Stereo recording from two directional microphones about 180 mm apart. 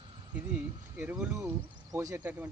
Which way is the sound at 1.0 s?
10° right (ahead or behind).